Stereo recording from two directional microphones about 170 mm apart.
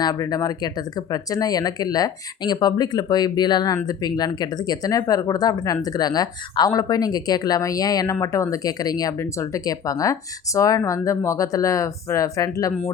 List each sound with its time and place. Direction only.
0.0 s speech: 20° left (ahead or behind)